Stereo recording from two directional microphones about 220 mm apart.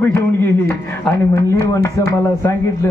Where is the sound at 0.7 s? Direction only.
10° left (ahead or behind).